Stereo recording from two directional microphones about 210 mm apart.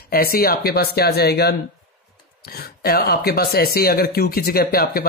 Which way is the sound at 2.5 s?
50° left (ahead or behind).